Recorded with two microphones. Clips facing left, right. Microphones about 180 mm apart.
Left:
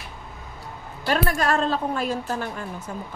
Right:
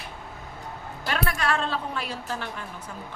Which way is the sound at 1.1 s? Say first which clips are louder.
Left 5 dB; 40° left (ahead or behind).